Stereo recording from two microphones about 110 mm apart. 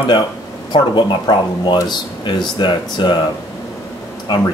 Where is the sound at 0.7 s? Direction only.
40° left (ahead or behind).